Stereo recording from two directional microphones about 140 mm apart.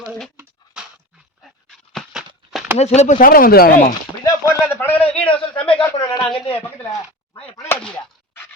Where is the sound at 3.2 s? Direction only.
90° left.